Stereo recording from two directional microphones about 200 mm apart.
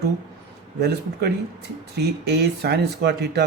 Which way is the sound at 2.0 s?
55° right (ahead or behind).